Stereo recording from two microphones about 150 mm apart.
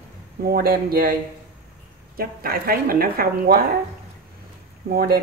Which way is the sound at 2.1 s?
80° right.